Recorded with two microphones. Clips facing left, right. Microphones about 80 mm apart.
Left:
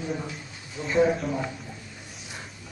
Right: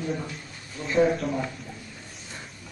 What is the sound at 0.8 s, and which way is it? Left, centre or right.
Speech, centre.